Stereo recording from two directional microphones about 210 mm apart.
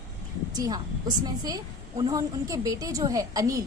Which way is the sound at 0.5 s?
20° right (ahead or behind).